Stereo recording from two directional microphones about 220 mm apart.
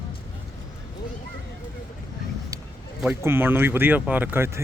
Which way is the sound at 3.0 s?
10° right (ahead or behind).